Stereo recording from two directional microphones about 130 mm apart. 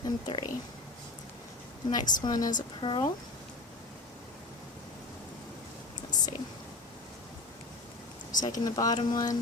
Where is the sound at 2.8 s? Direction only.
40° left (ahead or behind).